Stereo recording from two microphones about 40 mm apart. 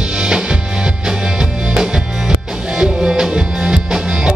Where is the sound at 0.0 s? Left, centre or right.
Right.